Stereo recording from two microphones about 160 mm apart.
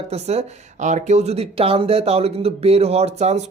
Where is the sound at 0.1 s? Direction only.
40° right (ahead or behind).